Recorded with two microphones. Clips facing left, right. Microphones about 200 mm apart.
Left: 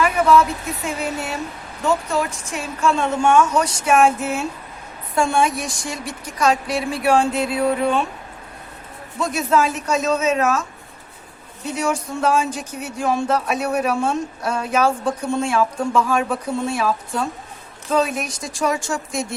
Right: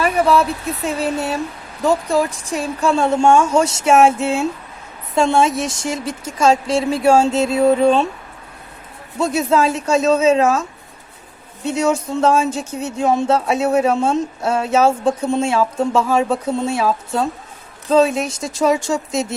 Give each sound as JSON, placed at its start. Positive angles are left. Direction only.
{"t": 0.0, "sound": "speech", "side_deg": -30}
{"t": 9.1, "sound": "speech", "side_deg": -25}
{"t": 11.6, "sound": "speech", "side_deg": -25}